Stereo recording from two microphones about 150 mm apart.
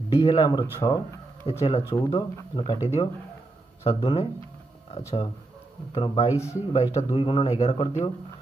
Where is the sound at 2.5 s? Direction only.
35° left (ahead or behind).